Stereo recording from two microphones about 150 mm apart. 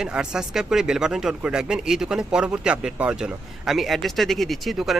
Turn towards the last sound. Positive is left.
turn(degrees=0)  # may be behind; listen again after turning